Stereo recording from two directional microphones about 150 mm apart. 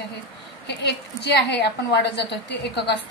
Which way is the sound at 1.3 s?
90° left.